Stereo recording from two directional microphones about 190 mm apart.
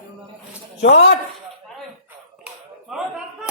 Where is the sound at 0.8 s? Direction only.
70° left (ahead or behind).